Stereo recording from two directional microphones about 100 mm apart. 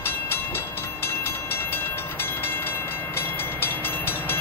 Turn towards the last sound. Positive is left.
turn(degrees=20)  # may be behind; listen again after turning